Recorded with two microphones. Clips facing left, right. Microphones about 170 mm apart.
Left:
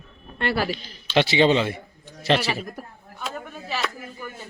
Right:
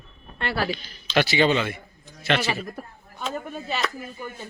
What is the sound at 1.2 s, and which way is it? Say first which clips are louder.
A man's voice: left 2 dB; 25° left (ahead or behind).